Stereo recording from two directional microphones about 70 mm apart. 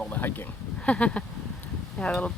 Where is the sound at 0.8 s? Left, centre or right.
Centre.